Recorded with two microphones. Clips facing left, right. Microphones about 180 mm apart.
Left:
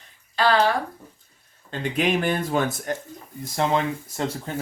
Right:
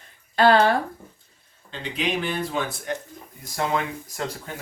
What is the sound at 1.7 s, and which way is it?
Speech, 50° left (ahead or behind).